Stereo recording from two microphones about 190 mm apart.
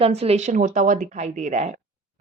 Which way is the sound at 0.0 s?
30° right (ahead or behind).